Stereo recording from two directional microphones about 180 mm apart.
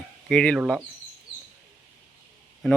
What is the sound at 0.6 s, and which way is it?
Speech, 5° right (ahead or behind).